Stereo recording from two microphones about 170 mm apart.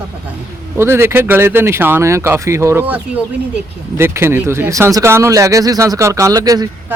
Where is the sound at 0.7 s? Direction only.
15° right (ahead or behind).